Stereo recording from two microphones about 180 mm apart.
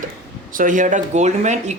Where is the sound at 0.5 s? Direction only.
45° right (ahead or behind).